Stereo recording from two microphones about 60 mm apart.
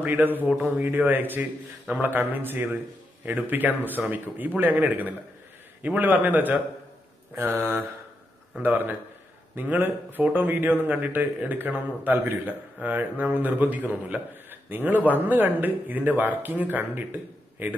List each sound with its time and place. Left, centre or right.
0.0 s a man's voice: right